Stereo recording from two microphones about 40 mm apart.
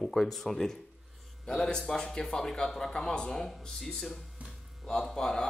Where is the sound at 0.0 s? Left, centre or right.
Centre.